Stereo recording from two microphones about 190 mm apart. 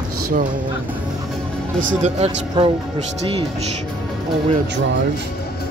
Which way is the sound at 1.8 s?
40° right (ahead or behind).